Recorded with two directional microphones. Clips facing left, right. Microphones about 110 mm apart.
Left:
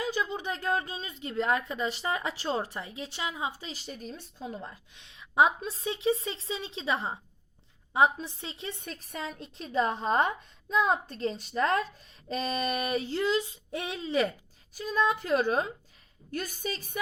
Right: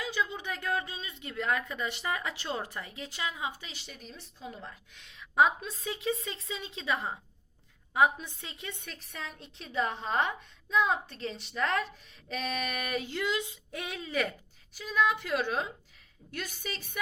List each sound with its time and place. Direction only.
0.3 s a woman's voice: 35° left (ahead or behind)
14.8 s a woman's voice: 40° left (ahead or behind)